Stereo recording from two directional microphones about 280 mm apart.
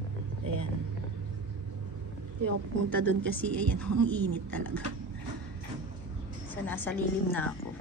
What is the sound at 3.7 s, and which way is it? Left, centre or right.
Speech, right.